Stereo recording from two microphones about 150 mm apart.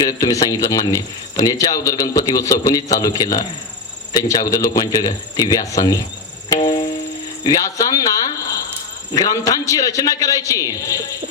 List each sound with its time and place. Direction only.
0.0 s speech: 25° left (ahead or behind)